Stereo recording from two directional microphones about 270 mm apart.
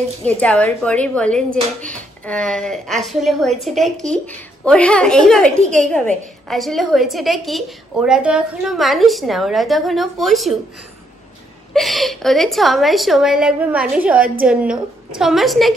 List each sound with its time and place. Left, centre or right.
0.2 s a woman's voice: centre
5.6 s a woman's voice: right
5.9 s a woman's voice: centre
11.7 s a woman's voice: centre